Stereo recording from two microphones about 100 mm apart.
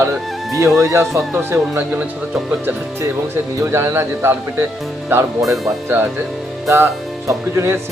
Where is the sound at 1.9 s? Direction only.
15° right (ahead or behind).